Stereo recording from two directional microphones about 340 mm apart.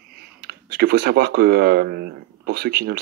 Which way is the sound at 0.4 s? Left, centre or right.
Right.